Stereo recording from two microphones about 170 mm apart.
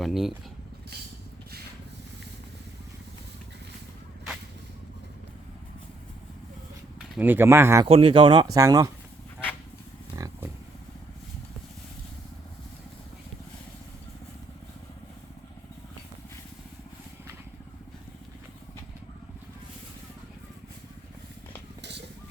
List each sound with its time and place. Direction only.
0.0 s speech: centre (ahead or behind)
7.2 s speech: 10° right (ahead or behind)
7.9 s speech: 35° right (ahead or behind)
10.2 s wild animals: 20° right (ahead or behind)
21.8 s a sound: 90° right